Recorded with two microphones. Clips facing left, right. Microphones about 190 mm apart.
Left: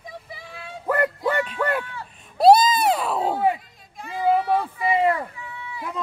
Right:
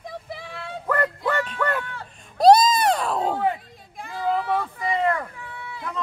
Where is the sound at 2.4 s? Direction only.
5° left (ahead or behind).